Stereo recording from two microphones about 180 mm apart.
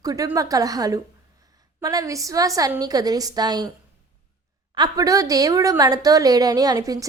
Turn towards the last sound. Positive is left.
turn(degrees=-20)  # may be behind; listen again after turning